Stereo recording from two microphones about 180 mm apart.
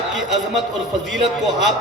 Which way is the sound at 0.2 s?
Centre (ahead or behind).